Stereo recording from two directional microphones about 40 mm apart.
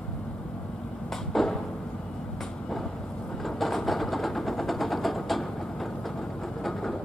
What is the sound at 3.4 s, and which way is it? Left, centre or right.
Vehicle, centre.